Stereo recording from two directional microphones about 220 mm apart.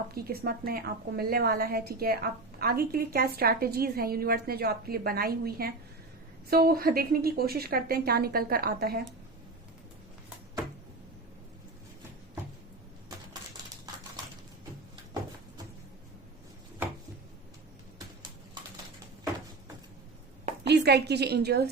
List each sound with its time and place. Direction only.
0.1 s a woman's voice: 45° right (ahead or behind)
20.7 s a woman's voice: 50° right (ahead or behind)